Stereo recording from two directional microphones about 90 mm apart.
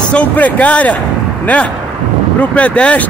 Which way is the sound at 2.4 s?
15° left (ahead or behind).